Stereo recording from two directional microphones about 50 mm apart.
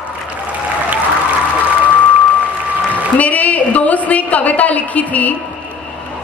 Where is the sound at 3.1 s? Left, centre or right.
Left.